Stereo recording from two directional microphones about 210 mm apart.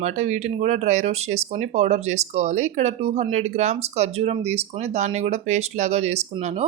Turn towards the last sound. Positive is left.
turn(degrees=-30)  # may be behind; listen again after turning